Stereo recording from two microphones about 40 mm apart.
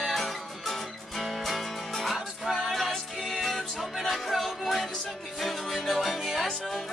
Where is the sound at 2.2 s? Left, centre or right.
Centre.